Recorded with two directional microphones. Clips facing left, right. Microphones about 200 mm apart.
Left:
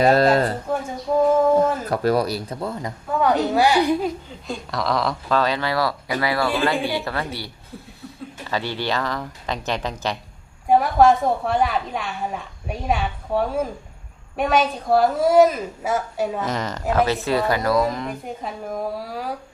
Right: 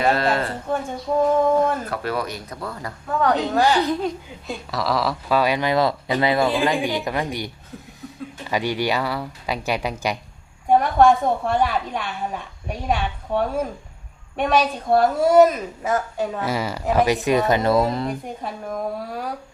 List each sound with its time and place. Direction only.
0.0 s speech: 35° left (ahead or behind)
0.7 s a woman's voice: centre (ahead or behind)
1.9 s speech: 40° left (ahead or behind)
3.1 s a woman's voice: 5° left (ahead or behind)
4.4 s speech: centre (ahead or behind)
10.7 s a woman's voice: 5° left (ahead or behind)
16.4 s speech: 10° right (ahead or behind); by 18.1 s 30° right (ahead or behind)
18.4 s a woman's voice: centre (ahead or behind)